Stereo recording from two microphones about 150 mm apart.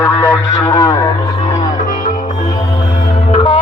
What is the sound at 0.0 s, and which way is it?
Radio, 15° left (ahead or behind).